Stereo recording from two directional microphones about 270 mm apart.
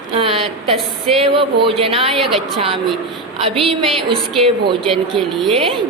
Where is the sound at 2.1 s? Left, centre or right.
Centre.